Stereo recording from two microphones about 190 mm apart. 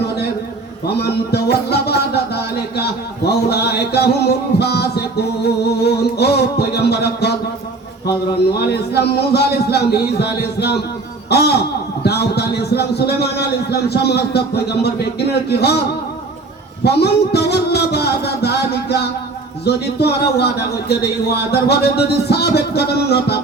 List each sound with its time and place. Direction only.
0.9 s speech: 60° left (ahead or behind)
8.5 s speech: 60° left (ahead or behind)
16.8 s music: 60° left (ahead or behind)
19.6 s speech: 60° left (ahead or behind)